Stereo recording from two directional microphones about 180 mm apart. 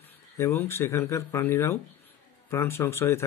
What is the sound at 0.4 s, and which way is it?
A man's voice, 15° left (ahead or behind).